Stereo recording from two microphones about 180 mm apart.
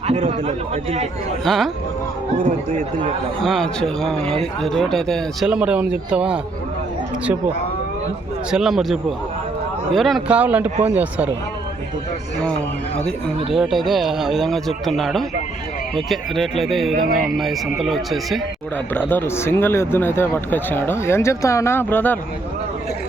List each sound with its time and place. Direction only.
0.1 s speech: 35° right (ahead or behind)
1.5 s speech: centre (ahead or behind)
2.4 s speech: 50° right (ahead or behind)
3.4 s speech: centre (ahead or behind)
4.2 s speech: 35° right (ahead or behind)
4.6 s speech: centre (ahead or behind)
8.4 s speech: 5° right (ahead or behind)
13.5 s speech: centre (ahead or behind)
17.0 s speech: 55° right (ahead or behind)
17.2 s speech: centre (ahead or behind)
18.9 s speech: 10° left (ahead or behind)